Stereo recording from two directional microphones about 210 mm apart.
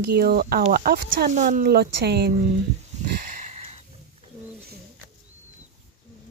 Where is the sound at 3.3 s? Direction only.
30° right (ahead or behind).